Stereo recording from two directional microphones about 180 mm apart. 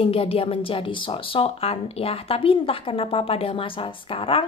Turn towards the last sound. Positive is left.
turn(degrees=30)  # may be behind; listen again after turning